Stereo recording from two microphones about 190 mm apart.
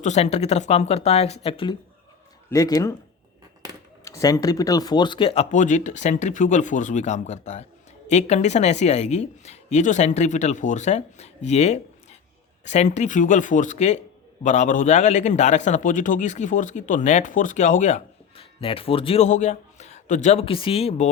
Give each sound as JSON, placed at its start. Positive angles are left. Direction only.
{"t": 0.0, "sound": "speech", "side_deg": 35}
{"t": 4.0, "sound": "speech", "side_deg": 15}